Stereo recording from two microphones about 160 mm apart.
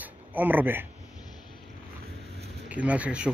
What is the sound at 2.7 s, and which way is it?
Speech, 10° right (ahead or behind).